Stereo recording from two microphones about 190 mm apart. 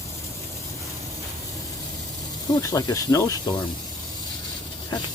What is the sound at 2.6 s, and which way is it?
Speech, 20° left (ahead or behind).